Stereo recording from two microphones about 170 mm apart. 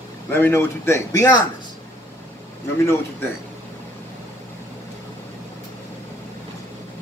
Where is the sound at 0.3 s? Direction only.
15° left (ahead or behind).